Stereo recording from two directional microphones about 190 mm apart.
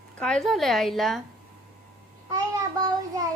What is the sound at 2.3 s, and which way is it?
Child singing, 20° right (ahead or behind).